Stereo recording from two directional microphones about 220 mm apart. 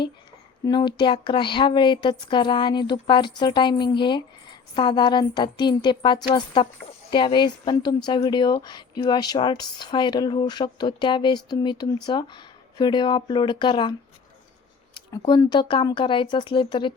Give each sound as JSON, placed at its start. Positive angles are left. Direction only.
{"t": 0.6, "sound": "speech", "side_deg": 20}
{"t": 15.2, "sound": "speech", "side_deg": 20}